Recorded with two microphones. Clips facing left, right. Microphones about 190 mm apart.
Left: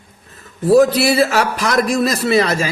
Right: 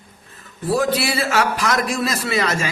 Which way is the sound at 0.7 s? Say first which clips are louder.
Left 8 dB; 40° left (ahead or behind).